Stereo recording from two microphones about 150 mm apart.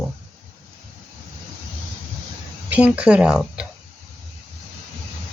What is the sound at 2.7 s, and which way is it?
Speech, 10° right (ahead or behind).